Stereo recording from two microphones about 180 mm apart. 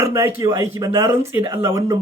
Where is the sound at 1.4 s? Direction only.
30° right (ahead or behind).